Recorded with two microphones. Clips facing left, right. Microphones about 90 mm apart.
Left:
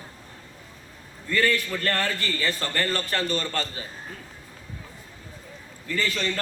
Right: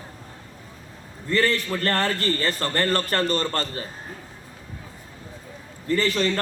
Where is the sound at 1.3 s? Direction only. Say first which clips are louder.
Right 2 dB; 35° right (ahead or behind).